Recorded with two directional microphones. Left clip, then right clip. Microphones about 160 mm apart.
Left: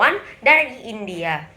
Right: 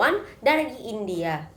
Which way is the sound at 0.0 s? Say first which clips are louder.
Left 5 dB; 20° right (ahead or behind).